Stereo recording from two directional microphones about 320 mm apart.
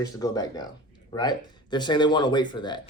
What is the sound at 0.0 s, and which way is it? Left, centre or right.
Speech, centre.